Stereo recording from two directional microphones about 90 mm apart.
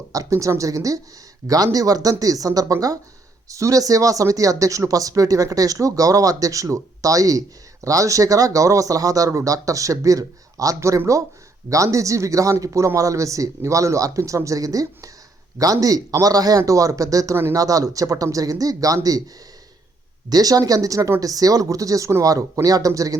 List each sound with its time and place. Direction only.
0.1 s speech: 40° right (ahead or behind)
20.3 s speech: 45° right (ahead or behind)